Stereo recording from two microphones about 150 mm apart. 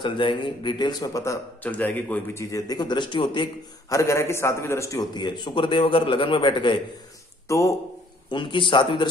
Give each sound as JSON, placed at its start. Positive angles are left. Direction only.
{"t": 0.0, "sound": "a man's voice", "side_deg": 35}
{"t": 1.6, "sound": "a man's voice", "side_deg": 10}
{"t": 2.5, "sound": "a man's voice", "side_deg": 25}
{"t": 3.9, "sound": "a man's voice", "side_deg": 20}
{"t": 5.1, "sound": "a man's voice", "side_deg": 30}
{"t": 7.4, "sound": "a man's voice", "side_deg": 20}
{"t": 8.3, "sound": "a man's voice", "side_deg": 30}